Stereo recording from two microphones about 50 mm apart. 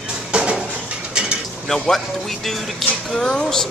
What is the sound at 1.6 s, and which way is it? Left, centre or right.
Speech, centre.